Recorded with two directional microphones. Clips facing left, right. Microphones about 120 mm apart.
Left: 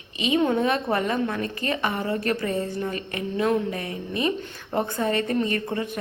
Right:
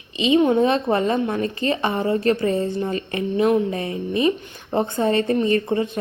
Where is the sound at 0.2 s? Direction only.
25° right (ahead or behind).